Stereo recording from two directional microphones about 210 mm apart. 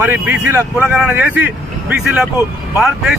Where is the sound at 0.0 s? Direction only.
10° right (ahead or behind).